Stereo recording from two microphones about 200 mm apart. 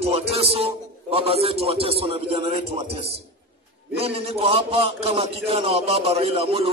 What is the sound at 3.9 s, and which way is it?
A man's voice, 30° right (ahead or behind).